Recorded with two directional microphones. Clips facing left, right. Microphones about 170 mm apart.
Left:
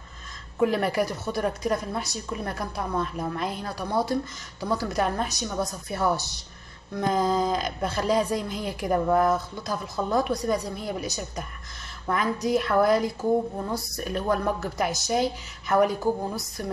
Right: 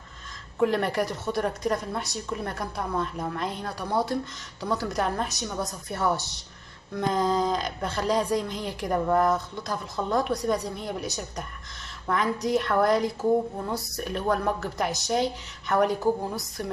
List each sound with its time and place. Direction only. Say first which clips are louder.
0.6 s a woman's voice: left 1 dB; 5° left (ahead or behind)